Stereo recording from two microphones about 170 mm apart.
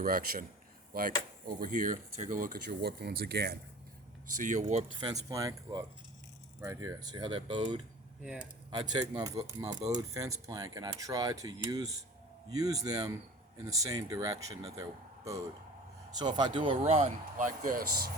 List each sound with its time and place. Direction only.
0.0 s speech: 60° right (ahead or behind)
4.4 s speech: 45° right (ahead or behind)
4.9 s speech: 25° right (ahead or behind)
8.2 s speech: 5° right (ahead or behind)
8.7 s speech: 25° right (ahead or behind)
16.8 s speech: 45° right (ahead or behind); by 18.1 s 60° right (ahead or behind)